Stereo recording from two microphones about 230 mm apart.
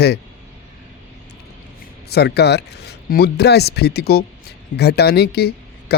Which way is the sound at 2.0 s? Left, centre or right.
Left.